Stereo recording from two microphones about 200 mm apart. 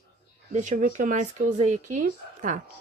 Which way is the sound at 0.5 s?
35° right (ahead or behind).